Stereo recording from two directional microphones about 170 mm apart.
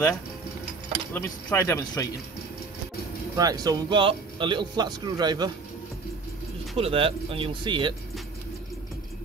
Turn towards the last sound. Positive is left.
turn(degrees=-30)  # may be behind; listen again after turning